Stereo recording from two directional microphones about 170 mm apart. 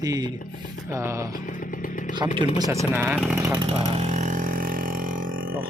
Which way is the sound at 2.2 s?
20° right (ahead or behind).